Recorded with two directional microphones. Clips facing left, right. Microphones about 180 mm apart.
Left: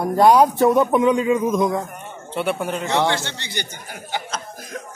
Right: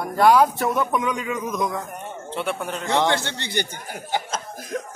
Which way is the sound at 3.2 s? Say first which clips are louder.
Right 3 dB; 55° right (ahead or behind).